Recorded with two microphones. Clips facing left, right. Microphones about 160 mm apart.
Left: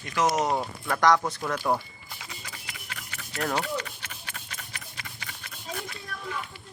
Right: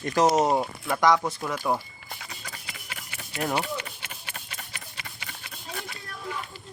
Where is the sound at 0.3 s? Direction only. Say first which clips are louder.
Right 3 dB; 25° right (ahead or behind).